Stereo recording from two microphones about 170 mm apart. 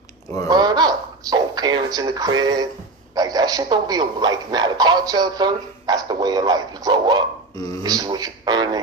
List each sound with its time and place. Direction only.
0.4 s a man's voice: 25° right (ahead or behind)